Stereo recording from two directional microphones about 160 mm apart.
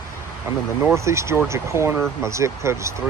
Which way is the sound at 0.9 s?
20° right (ahead or behind).